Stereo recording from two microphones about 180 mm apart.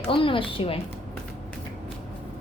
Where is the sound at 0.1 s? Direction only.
30° left (ahead or behind).